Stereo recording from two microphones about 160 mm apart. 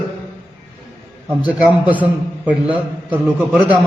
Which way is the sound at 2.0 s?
10° right (ahead or behind).